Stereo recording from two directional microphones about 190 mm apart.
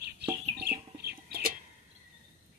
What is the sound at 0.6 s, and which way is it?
Chicken, 55° right (ahead or behind).